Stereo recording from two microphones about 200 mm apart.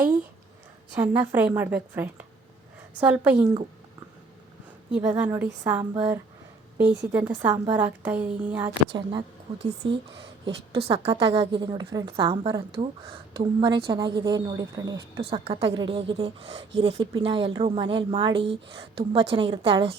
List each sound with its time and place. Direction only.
0.9 s a woman's voice: 10° right (ahead or behind)
4.9 s a woman's voice: 5° right (ahead or behind)
8.9 s a woman's voice: 25° right (ahead or behind)